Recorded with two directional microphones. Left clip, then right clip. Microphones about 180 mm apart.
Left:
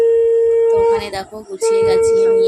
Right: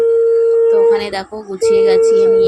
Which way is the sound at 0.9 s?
20° right (ahead or behind).